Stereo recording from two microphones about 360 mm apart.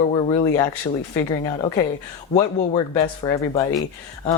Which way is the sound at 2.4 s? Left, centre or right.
Centre.